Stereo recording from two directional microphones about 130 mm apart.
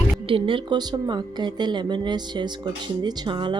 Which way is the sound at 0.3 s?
40° right (ahead or behind).